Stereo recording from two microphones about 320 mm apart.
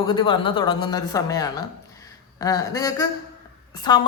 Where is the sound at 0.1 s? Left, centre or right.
Centre.